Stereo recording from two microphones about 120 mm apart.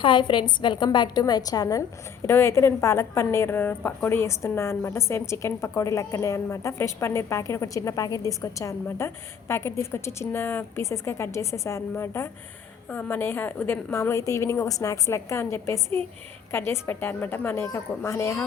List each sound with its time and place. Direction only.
0.0 s a woman's voice: 40° left (ahead or behind); by 18.4 s 25° left (ahead or behind)